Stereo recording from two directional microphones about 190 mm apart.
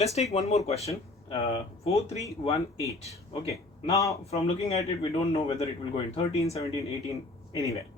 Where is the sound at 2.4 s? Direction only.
20° left (ahead or behind).